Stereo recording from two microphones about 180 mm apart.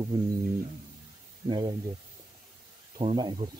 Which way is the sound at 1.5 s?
25° right (ahead or behind).